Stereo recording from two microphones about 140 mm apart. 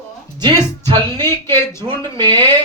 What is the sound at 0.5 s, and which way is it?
Speech, 15° left (ahead or behind).